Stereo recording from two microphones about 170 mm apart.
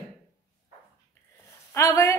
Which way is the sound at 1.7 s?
15° left (ahead or behind).